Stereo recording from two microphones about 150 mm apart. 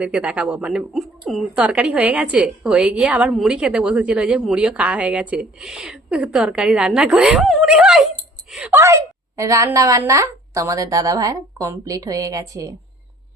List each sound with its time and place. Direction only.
0.0 s a woman's voice: 10° right (ahead or behind)
8.7 s a woman's voice: 20° right (ahead or behind)